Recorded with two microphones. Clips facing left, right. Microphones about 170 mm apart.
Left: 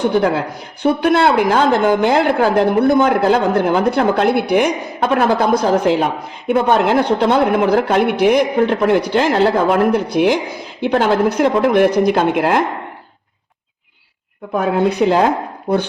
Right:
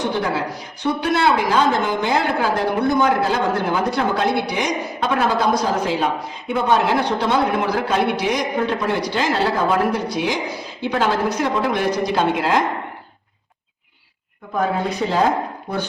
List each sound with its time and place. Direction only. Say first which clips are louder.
0.0 s a man's voice: left 6 dB; 55° left (ahead or behind)
14.6 s a man's voice: left 6 dB; 65° left (ahead or behind)